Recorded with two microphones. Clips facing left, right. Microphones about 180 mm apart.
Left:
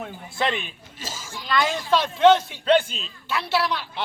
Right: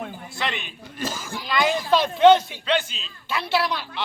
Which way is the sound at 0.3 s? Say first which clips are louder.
Left 5 dB; 50° left (ahead or behind).